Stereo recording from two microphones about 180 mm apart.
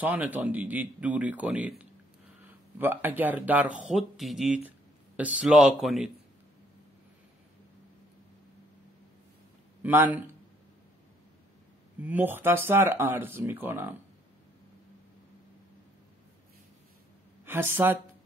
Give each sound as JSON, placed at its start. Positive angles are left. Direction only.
{"t": 0.0, "sound": "speech", "side_deg": -10}
{"t": 9.8, "sound": "a sound", "side_deg": -10}
{"t": 12.0, "sound": "speech", "side_deg": -10}
{"t": 17.5, "sound": "speech", "side_deg": -10}